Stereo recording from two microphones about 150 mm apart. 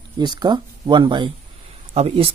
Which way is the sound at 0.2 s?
30° right (ahead or behind).